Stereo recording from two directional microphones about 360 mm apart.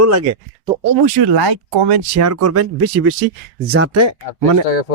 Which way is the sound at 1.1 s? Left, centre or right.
Right.